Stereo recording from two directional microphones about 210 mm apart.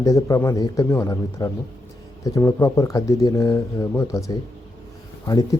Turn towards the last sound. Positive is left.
turn(degrees=15)  # may be behind; listen again after turning